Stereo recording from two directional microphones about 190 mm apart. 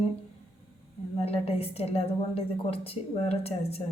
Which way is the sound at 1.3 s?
30° left (ahead or behind).